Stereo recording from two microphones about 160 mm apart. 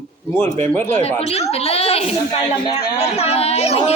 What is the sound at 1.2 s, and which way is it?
A woman's voice, 40° left (ahead or behind).